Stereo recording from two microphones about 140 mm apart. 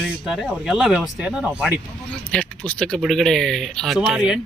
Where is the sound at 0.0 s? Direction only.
5° right (ahead or behind).